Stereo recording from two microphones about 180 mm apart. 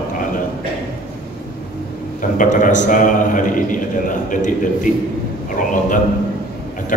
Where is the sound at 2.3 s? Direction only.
45° left (ahead or behind).